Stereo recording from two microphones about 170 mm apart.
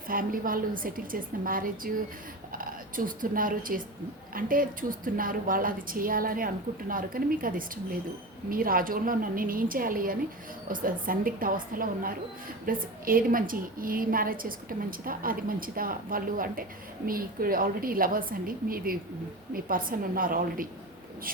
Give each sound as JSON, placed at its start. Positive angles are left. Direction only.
{"t": 0.1, "sound": "a woman's voice", "side_deg": -55}